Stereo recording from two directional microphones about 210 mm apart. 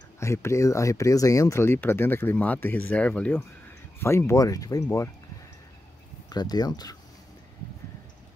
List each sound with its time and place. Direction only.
0.2 s speech: 15° left (ahead or behind)
6.3 s speech: 20° left (ahead or behind)